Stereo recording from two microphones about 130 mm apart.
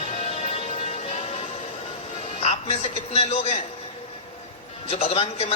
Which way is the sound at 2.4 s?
55° left (ahead or behind).